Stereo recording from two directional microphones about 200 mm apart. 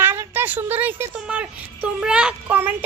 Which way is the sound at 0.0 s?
10° right (ahead or behind).